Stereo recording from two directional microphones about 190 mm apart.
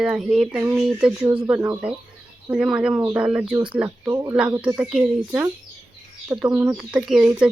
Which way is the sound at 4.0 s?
20° right (ahead or behind).